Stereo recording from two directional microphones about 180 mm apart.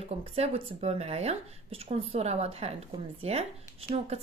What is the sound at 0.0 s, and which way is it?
A woman's voice, 35° right (ahead or behind).